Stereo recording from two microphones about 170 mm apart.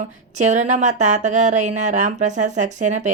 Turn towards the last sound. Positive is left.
turn(degrees=-45)  # may be behind; listen again after turning